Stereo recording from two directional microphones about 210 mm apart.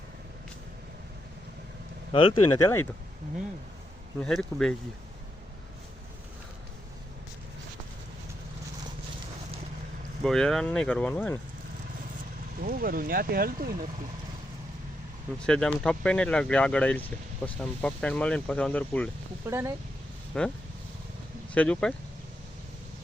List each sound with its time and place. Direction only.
2.1 s speech: 25° left (ahead or behind)
4.2 s speech: 5° left (ahead or behind)
10.2 s speech: centre (ahead or behind)
12.6 s speech: 45° right (ahead or behind)
15.4 s speech: 5° left (ahead or behind)
19.5 s speech: 15° right (ahead or behind)
20.3 s speech: 5° left (ahead or behind)
21.5 s speech: 5° left (ahead or behind)